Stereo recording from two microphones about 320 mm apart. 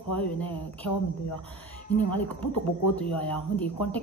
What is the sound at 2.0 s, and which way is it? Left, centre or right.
Speech, left.